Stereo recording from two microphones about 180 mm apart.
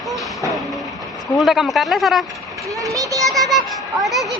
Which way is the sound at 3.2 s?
Centre (ahead or behind).